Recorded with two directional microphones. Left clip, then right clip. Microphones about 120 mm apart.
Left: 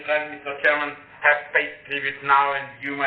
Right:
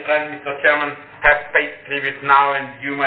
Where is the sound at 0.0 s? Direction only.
25° right (ahead or behind).